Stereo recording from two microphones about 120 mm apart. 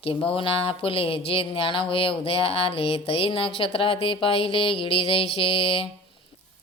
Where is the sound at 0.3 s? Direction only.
50° left (ahead or behind).